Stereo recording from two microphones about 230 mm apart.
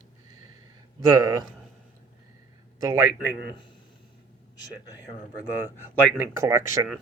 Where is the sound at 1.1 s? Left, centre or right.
Centre.